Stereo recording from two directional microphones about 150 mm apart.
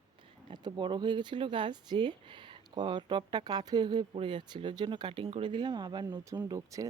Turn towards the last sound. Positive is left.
turn(degrees=-20)  # may be behind; listen again after turning